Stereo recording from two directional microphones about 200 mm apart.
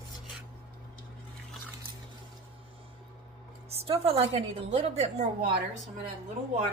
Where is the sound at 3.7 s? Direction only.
30° right (ahead or behind).